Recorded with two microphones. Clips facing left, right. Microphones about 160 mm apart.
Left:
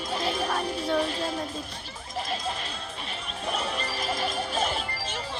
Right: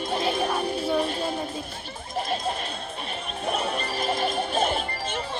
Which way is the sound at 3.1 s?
55° right (ahead or behind).